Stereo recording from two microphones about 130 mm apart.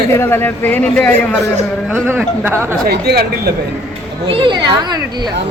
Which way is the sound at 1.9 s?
15° right (ahead or behind).